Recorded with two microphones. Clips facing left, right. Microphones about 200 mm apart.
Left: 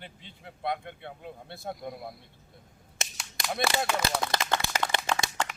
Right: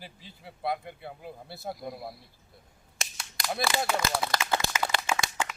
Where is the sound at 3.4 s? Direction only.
Centre (ahead or behind).